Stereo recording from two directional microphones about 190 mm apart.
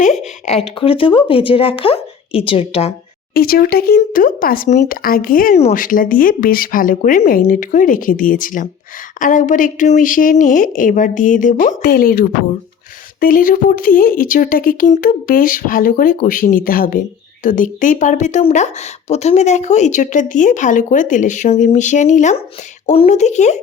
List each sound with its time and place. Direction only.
0.0 s speech: 35° left (ahead or behind)
3.3 s speech: 50° left (ahead or behind)